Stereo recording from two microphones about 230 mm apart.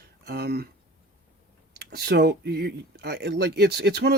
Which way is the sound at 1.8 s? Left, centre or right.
Right.